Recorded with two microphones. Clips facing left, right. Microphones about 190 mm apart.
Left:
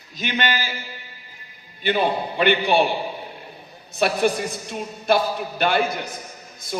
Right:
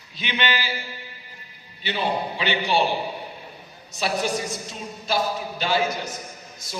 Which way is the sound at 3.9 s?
55° left (ahead or behind).